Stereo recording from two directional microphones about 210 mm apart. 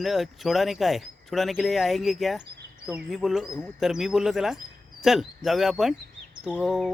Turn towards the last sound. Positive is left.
turn(degrees=0)  # may be behind; listen again after turning